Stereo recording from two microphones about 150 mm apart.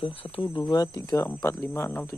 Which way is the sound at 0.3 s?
35° left (ahead or behind).